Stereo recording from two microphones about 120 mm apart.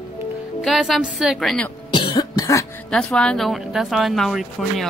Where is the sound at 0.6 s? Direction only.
Centre (ahead or behind).